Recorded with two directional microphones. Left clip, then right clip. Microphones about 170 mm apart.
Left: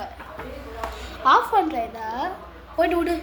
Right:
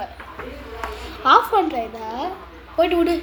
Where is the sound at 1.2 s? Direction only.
30° right (ahead or behind).